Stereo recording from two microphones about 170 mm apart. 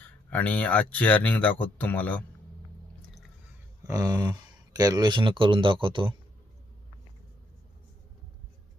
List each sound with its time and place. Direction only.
0.3 s speech: 10° left (ahead or behind)
3.8 s speech: 20° right (ahead or behind)